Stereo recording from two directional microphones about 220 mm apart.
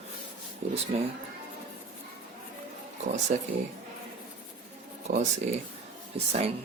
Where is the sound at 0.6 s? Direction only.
35° right (ahead or behind).